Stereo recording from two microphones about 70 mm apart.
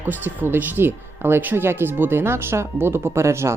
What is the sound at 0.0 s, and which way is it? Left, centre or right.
Speech, right.